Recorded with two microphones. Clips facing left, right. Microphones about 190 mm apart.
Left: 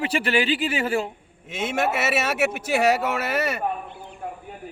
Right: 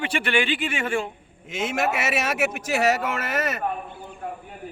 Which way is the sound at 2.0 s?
5° left (ahead or behind).